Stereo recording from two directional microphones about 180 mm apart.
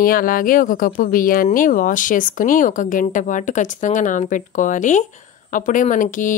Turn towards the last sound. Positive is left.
turn(degrees=45)  # may be behind; listen again after turning